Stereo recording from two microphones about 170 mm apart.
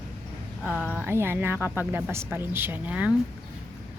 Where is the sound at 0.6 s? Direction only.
5° left (ahead or behind).